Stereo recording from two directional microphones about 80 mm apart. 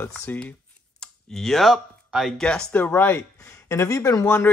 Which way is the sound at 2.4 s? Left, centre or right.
Centre.